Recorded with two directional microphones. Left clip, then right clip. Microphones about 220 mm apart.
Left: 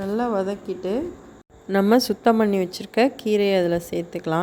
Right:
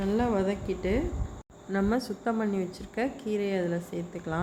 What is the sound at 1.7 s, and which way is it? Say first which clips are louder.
A woman's voice: left 11 dB; 40° left (ahead or behind).